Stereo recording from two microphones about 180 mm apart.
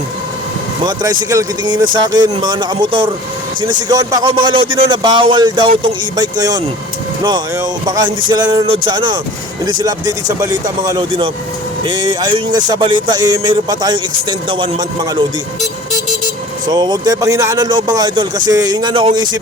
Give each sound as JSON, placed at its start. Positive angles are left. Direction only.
{"t": 0.9, "sound": "speech", "side_deg": -20}
{"t": 16.6, "sound": "speech", "side_deg": -20}